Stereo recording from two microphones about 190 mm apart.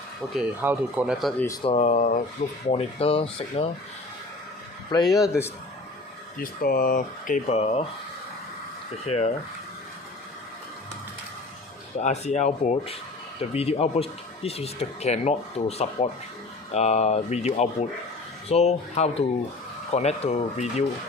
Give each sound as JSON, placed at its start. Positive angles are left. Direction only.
{"t": 0.6, "sound": "speech", "side_deg": -10}
{"t": 1.6, "sound": "speech", "side_deg": 35}
{"t": 2.6, "sound": "speech", "side_deg": 30}
{"t": 4.9, "sound": "speech", "side_deg": 20}
{"t": 6.4, "sound": "speech", "side_deg": 50}
{"t": 9.0, "sound": "speech", "side_deg": 35}
{"t": 11.9, "sound": "speech", "side_deg": 35}